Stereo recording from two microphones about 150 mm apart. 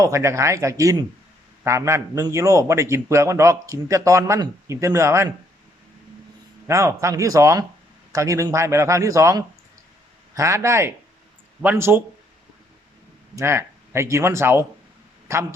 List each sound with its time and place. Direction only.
0.0 s a man's voice: 20° right (ahead or behind)
6.7 s a man's voice: 20° right (ahead or behind)
13.3 s a man's voice: 20° right (ahead or behind)